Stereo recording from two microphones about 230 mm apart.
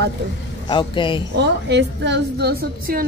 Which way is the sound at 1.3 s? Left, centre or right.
Right.